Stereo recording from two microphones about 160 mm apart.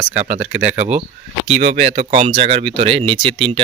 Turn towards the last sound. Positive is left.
turn(degrees=-35)  # may be behind; listen again after turning